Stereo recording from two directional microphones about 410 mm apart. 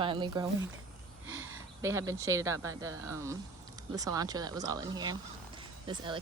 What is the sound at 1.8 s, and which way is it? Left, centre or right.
Speech, centre.